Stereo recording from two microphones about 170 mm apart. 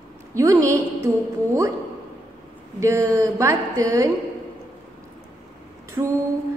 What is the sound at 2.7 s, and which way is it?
A woman's voice, 15° right (ahead or behind).